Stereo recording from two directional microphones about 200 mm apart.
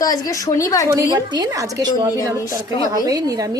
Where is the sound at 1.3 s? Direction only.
20° right (ahead or behind).